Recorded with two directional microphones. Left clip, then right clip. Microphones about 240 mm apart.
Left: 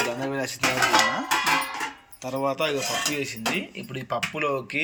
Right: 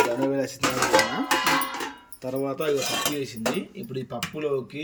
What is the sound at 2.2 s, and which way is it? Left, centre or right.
Speech, centre.